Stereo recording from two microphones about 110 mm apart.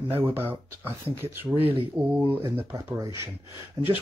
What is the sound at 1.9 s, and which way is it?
Speech, 10° right (ahead or behind).